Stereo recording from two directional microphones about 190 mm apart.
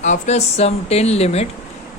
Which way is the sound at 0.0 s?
40° left (ahead or behind).